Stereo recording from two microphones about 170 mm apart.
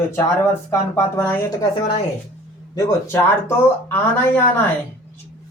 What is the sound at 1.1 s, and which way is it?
Speech, 20° left (ahead or behind).